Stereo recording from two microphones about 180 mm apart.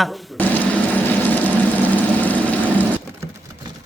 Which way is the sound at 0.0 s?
5° left (ahead or behind).